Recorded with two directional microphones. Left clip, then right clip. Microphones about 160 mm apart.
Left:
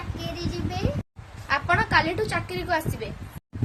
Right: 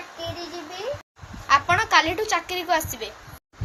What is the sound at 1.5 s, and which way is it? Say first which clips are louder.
A woman's voice: right 4 dB; 15° left (ahead or behind).